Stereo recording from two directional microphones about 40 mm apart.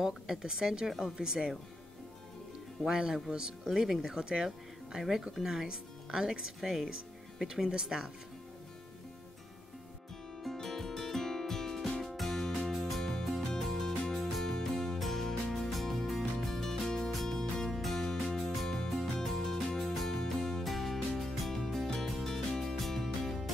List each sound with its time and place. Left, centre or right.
0.0 s speech: centre
2.9 s speech: centre
3.6 s speech: centre
4.5 s speech: centre
6.6 s speech: centre
10.4 s music: centre
17.1 s music: centre